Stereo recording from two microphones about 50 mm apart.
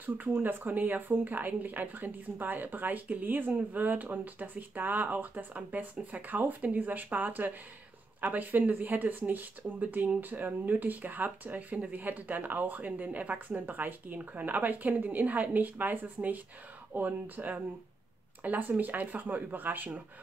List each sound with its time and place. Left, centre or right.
0.0 s speech: right